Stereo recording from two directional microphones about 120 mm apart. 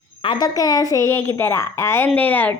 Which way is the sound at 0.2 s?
40° left (ahead or behind).